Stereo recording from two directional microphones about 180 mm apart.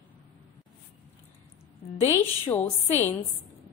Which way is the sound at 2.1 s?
10° left (ahead or behind).